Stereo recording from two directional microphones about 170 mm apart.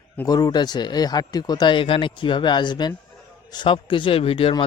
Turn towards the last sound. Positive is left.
turn(degrees=30)  # may be behind; listen again after turning